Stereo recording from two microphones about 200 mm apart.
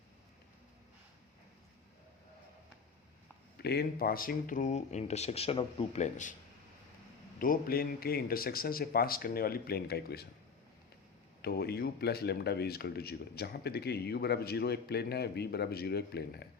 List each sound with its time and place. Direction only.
3.6 s speech: 55° left (ahead or behind); by 6.3 s 35° left (ahead or behind)
7.3 s speech: 45° left (ahead or behind)
11.4 s speech: 55° left (ahead or behind)